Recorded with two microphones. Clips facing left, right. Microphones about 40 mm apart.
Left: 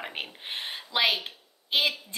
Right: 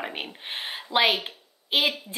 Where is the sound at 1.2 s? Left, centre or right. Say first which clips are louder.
Right 2 dB; centre.